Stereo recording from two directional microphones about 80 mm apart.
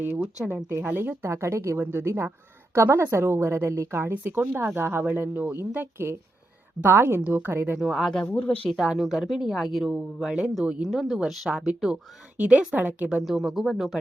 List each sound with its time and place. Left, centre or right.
0.2 s speech: centre
0.5 s a woman's voice: right
7.8 s speech: centre
8.2 s speech: centre
8.8 s speech: centre